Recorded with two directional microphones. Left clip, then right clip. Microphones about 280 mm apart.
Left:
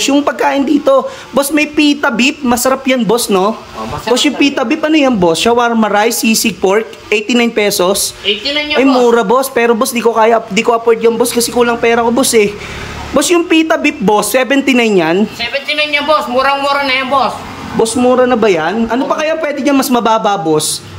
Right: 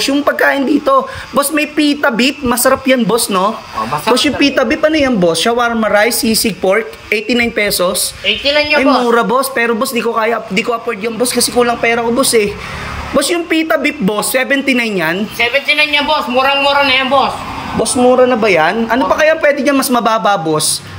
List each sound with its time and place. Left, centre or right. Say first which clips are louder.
0.0 s a man's voice: even; centre
16.1 s a man's voice: left 1 dB; left
18.0 s a man's voice: right 1 dB; centre